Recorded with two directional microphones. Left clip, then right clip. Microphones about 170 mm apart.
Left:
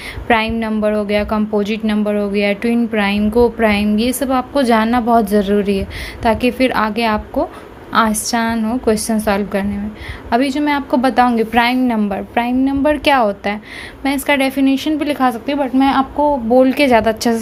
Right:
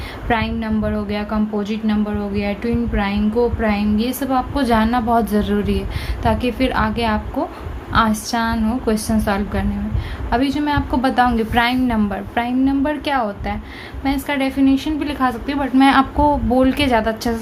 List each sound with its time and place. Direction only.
0.3 s a woman's voice: 50° left (ahead or behind)
15.4 s a woman's voice: 25° left (ahead or behind)
15.7 s a woman's voice: 15° left (ahead or behind)
16.7 s a woman's voice: 35° left (ahead or behind)